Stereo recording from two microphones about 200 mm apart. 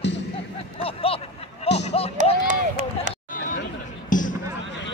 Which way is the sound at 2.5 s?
40° right (ahead or behind).